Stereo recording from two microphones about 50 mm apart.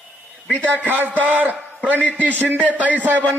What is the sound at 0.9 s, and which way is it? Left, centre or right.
Speech, right.